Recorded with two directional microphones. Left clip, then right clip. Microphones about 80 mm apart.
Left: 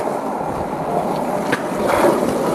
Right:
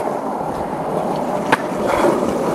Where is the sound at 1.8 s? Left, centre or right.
Left.